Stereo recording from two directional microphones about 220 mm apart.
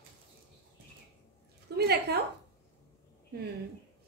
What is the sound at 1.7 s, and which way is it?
Speech, 45° right (ahead or behind).